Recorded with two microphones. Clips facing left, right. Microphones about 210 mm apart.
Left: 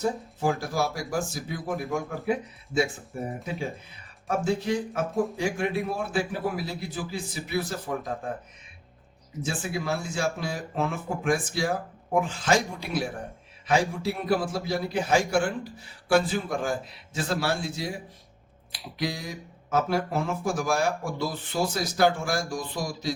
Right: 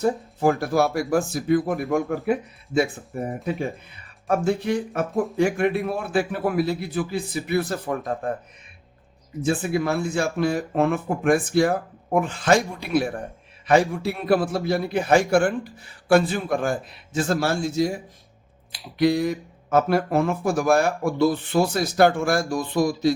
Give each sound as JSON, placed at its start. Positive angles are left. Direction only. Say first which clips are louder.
{"t": 0.0, "sound": "speech", "louder": "right 6 dB", "side_deg": -60}
{"t": 9.4, "sound": "a man's voice", "louder": "right 8 dB", "side_deg": -60}
{"t": 18.7, "sound": "speech", "louder": "right 8 dB", "side_deg": 0}
{"t": 19.0, "sound": "speech", "louder": "right 12 dB", "side_deg": -60}